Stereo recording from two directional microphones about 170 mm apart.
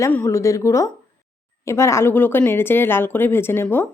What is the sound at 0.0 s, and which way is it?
A woman's voice, 15° left (ahead or behind).